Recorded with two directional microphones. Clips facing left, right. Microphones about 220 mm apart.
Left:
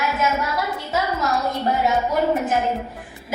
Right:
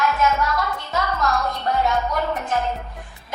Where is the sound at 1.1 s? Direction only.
25° left (ahead or behind).